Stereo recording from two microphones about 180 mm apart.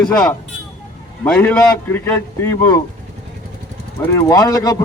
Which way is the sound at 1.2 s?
10° left (ahead or behind).